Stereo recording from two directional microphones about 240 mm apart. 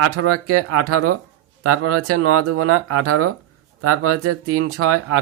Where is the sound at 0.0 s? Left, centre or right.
Right.